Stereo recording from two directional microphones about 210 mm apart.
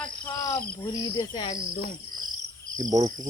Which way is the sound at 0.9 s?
20° left (ahead or behind).